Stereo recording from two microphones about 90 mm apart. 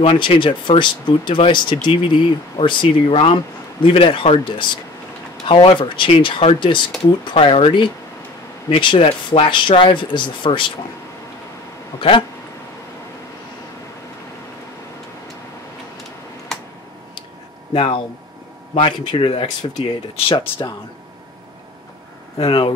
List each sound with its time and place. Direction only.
0.0 s speech: 85° left; by 6.8 s 65° left (ahead or behind)
7.2 s speech: 90° left; by 10.7 s 65° left (ahead or behind)
16.5 s a sound: 5° left (ahead or behind)
17.7 s speech: 70° left (ahead or behind)
20.2 s speech: 85° left
22.4 s speech: 75° left (ahead or behind)